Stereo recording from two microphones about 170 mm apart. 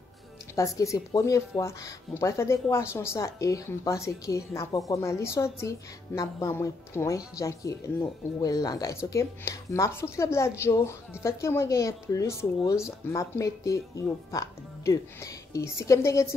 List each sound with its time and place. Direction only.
0.6 s a woman's voice: 20° left (ahead or behind)